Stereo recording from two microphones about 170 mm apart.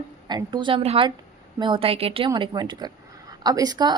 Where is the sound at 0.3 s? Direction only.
25° right (ahead or behind).